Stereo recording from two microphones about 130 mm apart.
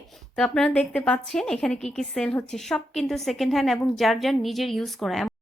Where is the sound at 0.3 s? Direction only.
5° left (ahead or behind).